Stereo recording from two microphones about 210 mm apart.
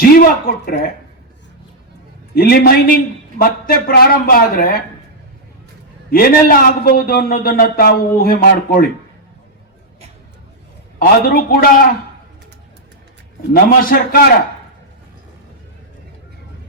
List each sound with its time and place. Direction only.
0.0 s a man's voice: 45° left (ahead or behind)
2.3 s a man's voice: 45° left (ahead or behind)
6.1 s a man's voice: 45° left (ahead or behind)
11.0 s a man's voice: 45° left (ahead or behind)
13.8 s a man's voice: 45° left (ahead or behind)